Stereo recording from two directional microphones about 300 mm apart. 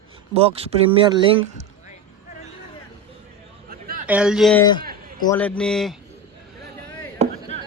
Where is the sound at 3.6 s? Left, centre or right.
Right.